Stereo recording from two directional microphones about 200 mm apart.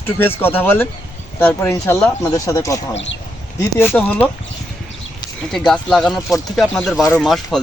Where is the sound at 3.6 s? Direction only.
10° left (ahead or behind).